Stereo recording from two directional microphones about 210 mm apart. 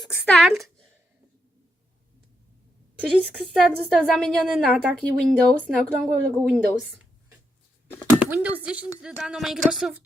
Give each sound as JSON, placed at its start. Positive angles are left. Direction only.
{"t": 0.0, "sound": "speech", "side_deg": 10}
{"t": 0.3, "sound": "a woman's voice", "side_deg": 0}
{"t": 3.0, "sound": "a woman's voice", "side_deg": -5}
{"t": 8.3, "sound": "a woman's voice", "side_deg": -10}